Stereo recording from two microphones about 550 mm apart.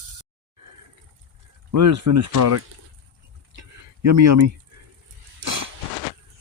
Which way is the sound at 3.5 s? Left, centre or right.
Right.